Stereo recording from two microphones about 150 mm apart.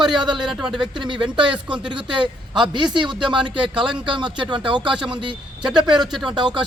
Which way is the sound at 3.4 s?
35° right (ahead or behind).